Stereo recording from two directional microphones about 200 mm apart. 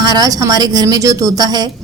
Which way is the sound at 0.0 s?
20° right (ahead or behind).